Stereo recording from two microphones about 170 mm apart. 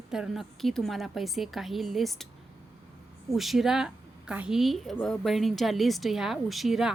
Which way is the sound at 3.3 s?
Centre (ahead or behind).